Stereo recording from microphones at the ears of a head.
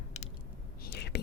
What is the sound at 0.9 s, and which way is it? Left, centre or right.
Whispering, left.